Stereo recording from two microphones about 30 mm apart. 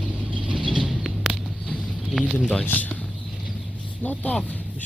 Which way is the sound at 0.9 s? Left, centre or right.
Centre.